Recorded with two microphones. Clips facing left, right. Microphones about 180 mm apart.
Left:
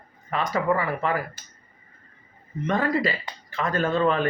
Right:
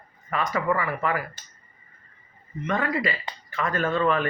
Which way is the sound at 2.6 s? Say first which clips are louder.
Left 2 dB; 35° left (ahead or behind).